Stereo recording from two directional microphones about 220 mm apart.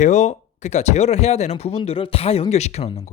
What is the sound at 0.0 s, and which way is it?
Speech, 35° left (ahead or behind).